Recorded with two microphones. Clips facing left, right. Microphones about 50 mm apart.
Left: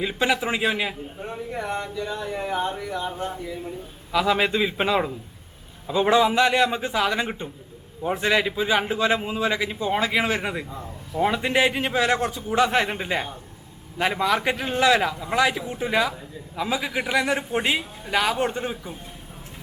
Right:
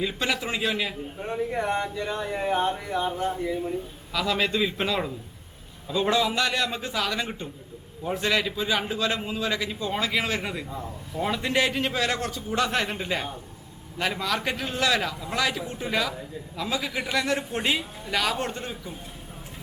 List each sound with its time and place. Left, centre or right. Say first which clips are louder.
0.0 s a man's voice: left 4 dB; centre
1.2 s speech: right 5 dB; centre
1.5 s speech: right 1 dB; centre
4.1 s a man's voice: left 4 dB; centre
10.7 s speech: even; centre
11.2 s a man's voice: left 4 dB; centre